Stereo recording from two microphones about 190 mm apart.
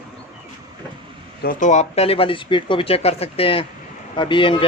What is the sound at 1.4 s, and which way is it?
A man's voice, 40° left (ahead or behind).